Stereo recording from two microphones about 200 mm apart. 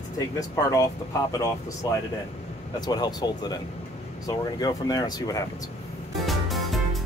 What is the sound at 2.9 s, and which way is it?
Speech, 20° left (ahead or behind).